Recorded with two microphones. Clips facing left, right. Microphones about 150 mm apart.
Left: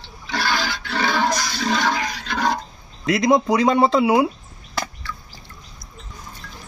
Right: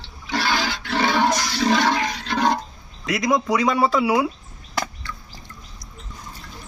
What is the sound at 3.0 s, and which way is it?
Speech, 30° left (ahead or behind).